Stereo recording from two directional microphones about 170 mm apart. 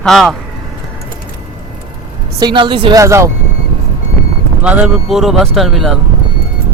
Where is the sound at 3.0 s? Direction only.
15° right (ahead or behind).